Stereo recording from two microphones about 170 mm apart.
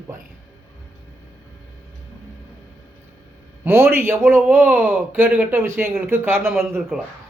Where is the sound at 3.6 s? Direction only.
15° right (ahead or behind).